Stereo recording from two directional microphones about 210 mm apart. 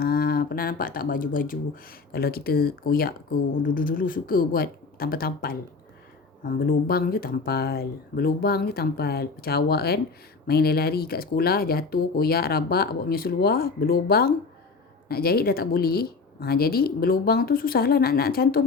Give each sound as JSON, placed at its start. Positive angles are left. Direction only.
{"t": 0.0, "sound": "speech", "side_deg": 45}